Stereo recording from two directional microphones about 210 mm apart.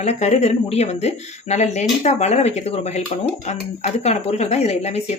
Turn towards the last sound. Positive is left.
turn(degrees=30)  # may be behind; listen again after turning